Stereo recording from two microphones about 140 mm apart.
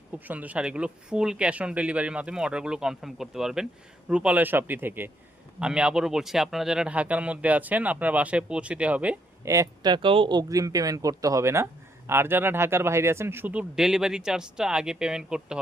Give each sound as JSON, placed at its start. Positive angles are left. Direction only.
{"t": 0.3, "sound": "speech", "side_deg": -10}
{"t": 9.4, "sound": "speech", "side_deg": -20}